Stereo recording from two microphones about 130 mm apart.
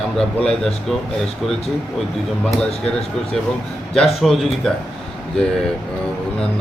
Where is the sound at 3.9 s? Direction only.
5° left (ahead or behind).